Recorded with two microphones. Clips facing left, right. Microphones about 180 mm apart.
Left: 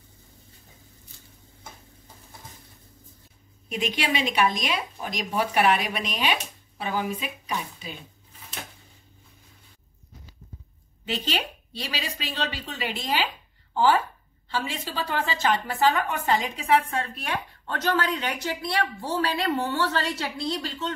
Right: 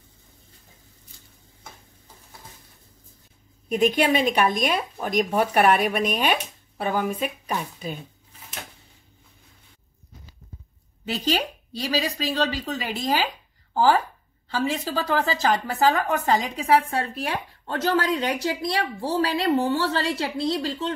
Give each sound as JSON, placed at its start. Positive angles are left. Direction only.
{"t": 3.6, "sound": "a woman's voice", "side_deg": -50}
{"t": 11.2, "sound": "a woman's voice", "side_deg": -40}